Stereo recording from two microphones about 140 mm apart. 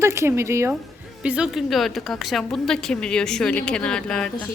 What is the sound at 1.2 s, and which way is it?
A woman's voice, 5° right (ahead or behind).